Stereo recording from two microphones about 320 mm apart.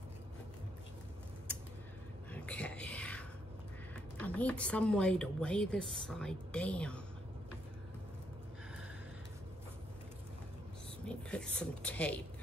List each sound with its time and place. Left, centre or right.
2.3 s a sound: centre
3.9 s speech: centre
11.1 s speech: centre